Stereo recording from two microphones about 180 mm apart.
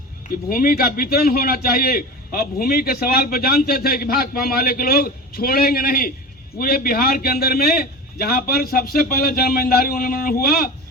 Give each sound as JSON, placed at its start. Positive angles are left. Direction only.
{"t": 0.5, "sound": "a man's voice", "side_deg": 55}